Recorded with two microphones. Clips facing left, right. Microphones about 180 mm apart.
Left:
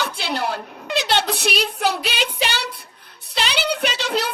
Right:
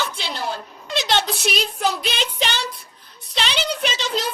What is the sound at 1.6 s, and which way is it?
Child singing, 65° left (ahead or behind).